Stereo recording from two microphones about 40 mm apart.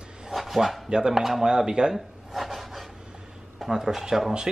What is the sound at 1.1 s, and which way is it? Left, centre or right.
Speech, centre.